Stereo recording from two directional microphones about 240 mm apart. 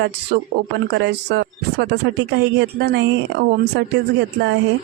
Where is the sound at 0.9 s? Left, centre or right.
Right.